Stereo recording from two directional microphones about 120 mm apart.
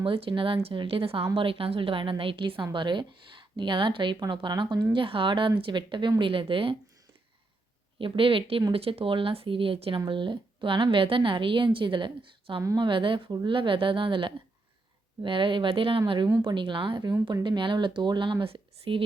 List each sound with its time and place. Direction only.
0.0 s a woman's voice: 50° right (ahead or behind)
7.9 s a woman's voice: 45° right (ahead or behind)